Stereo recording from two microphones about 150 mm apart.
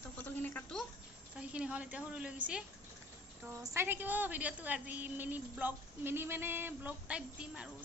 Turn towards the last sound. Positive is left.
turn(degrees=-5)  # may be behind; listen again after turning